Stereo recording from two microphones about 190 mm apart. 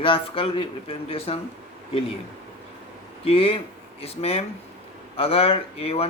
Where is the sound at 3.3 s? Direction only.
30° left (ahead or behind).